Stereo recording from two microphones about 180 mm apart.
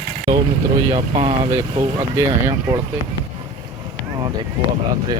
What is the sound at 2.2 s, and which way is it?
Speech, 15° right (ahead or behind).